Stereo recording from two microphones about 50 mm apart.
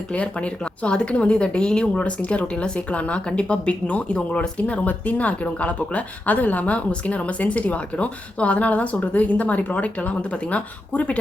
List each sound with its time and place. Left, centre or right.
0.1 s speech: left